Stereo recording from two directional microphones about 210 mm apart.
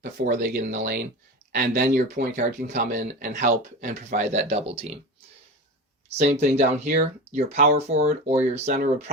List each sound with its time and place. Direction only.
0.0 s speech: 40° right (ahead or behind)
6.1 s speech: 35° right (ahead or behind)